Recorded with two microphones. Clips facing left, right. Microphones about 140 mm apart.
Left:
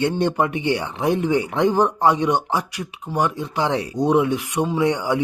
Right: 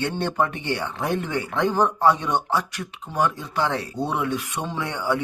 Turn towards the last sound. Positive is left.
turn(degrees=15)  # may be behind; listen again after turning